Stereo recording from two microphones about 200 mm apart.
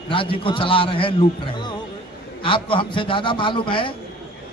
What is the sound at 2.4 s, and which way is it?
A man's voice, 25° left (ahead or behind).